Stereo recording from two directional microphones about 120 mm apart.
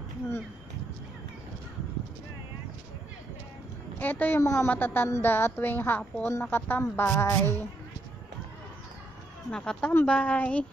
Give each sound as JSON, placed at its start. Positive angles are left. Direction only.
{"t": 4.0, "sound": "a woman's voice", "side_deg": 15}
{"t": 9.5, "sound": "a woman's voice", "side_deg": 5}